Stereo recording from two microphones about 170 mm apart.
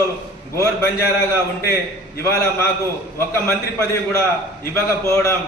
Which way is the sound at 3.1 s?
15° left (ahead or behind).